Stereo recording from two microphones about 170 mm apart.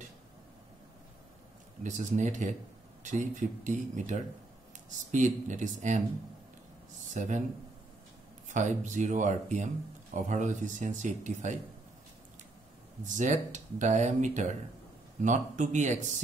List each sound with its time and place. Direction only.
1.8 s speech: 45° right (ahead or behind)
7.2 s speech: 45° right (ahead or behind)
8.5 s speech: 45° right (ahead or behind)
13.0 s speech: 45° right (ahead or behind)